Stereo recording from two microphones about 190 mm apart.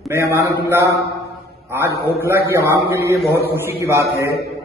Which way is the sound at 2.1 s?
10° right (ahead or behind).